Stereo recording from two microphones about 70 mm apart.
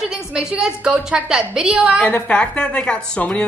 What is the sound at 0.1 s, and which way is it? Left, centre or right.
A woman's voice, centre.